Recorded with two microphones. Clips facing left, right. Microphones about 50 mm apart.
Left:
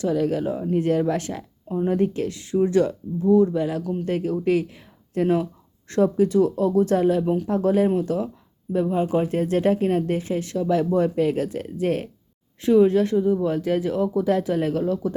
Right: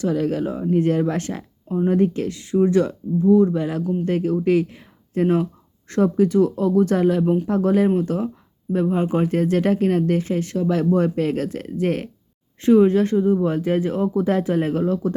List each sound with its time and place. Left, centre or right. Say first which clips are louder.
0.0 s speech: right 1 dB; right